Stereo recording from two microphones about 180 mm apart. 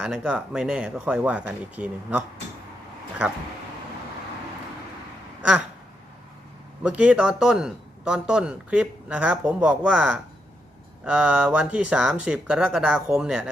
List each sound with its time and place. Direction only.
0.0 s speech: 5° right (ahead or behind)
6.8 s speech: 5° right (ahead or behind)